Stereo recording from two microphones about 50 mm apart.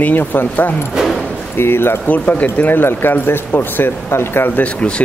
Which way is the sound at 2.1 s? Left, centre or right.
Left.